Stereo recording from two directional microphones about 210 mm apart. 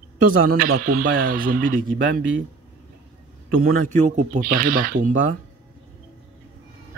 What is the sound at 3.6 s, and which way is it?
Speech, 40° right (ahead or behind).